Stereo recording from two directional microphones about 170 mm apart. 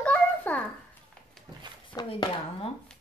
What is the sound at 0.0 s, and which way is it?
Babbling, 10° left (ahead or behind).